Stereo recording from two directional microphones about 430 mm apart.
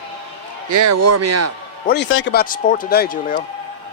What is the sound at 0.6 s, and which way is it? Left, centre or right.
Speech, right.